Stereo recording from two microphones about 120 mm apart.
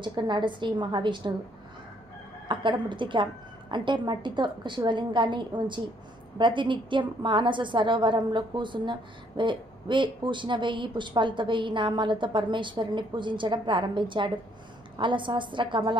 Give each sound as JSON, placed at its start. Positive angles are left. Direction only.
{"t": 0.0, "sound": "a woman's voice", "side_deg": -40}
{"t": 2.4, "sound": "a woman's voice", "side_deg": -40}